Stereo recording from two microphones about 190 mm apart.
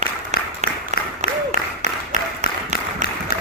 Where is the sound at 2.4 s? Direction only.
35° right (ahead or behind).